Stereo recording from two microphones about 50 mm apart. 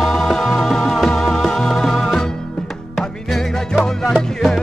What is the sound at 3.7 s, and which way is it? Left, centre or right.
Music, centre.